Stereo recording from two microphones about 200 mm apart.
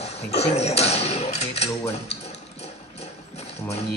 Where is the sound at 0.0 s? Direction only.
30° left (ahead or behind).